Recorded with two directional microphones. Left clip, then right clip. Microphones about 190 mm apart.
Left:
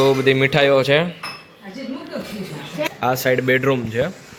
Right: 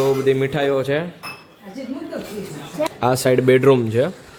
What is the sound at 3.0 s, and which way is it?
Speech, 45° right (ahead or behind).